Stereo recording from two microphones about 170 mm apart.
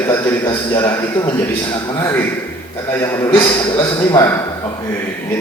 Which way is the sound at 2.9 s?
15° left (ahead or behind).